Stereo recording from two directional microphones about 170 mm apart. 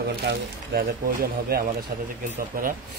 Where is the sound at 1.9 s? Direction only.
55° right (ahead or behind).